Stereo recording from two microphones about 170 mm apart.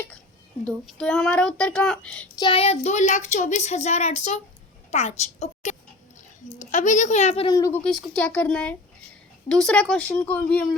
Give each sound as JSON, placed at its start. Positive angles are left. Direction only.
{"t": 0.6, "sound": "speech", "side_deg": 5}
{"t": 2.4, "sound": "a child's voice", "side_deg": 35}
{"t": 7.4, "sound": "speech", "side_deg": 20}
{"t": 7.9, "sound": "speech", "side_deg": 0}